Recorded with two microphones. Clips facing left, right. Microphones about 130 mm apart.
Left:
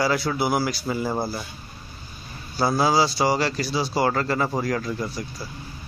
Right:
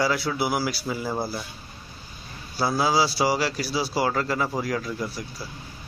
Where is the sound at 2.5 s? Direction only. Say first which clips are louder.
Left 2 dB; 5° right (ahead or behind).